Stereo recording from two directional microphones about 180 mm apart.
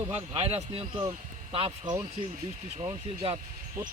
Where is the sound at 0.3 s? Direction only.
35° right (ahead or behind).